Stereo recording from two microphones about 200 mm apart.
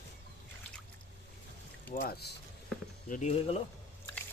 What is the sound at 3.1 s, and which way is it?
Speech, 35° left (ahead or behind).